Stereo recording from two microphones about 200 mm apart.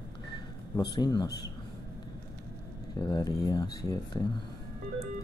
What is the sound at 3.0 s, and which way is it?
Speech, 20° left (ahead or behind).